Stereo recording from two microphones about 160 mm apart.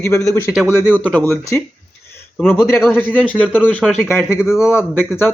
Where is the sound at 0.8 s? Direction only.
10° left (ahead or behind).